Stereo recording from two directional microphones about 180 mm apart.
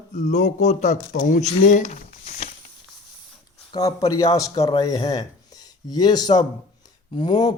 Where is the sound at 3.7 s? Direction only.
20° left (ahead or behind).